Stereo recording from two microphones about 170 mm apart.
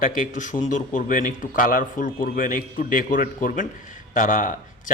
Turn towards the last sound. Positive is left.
turn(degrees=50)  # may be behind; listen again after turning